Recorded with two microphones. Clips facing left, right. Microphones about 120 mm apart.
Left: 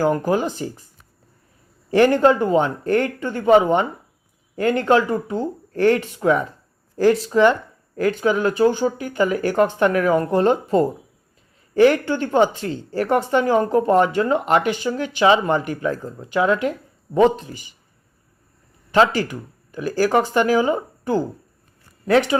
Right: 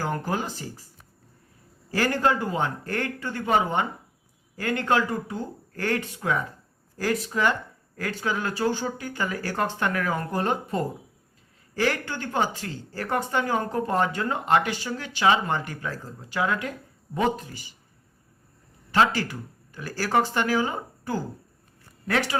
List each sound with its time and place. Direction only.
0.3 s speech: 15° left (ahead or behind)
1.9 s speech: 20° left (ahead or behind)
17.4 s speech: 15° left (ahead or behind)
18.9 s speech: 20° left (ahead or behind)